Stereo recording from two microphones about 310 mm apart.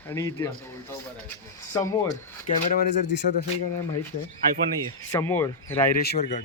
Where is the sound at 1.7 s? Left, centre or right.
Centre.